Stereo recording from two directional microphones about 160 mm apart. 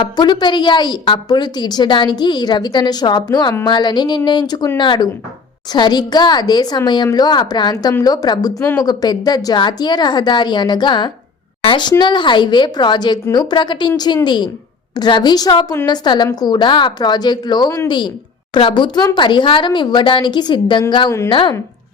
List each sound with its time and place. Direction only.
0.0 s a woman's voice: 25° left (ahead or behind)